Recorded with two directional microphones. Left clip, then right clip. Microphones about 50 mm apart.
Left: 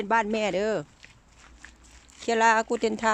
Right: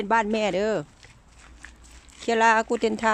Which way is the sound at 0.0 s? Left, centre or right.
Centre.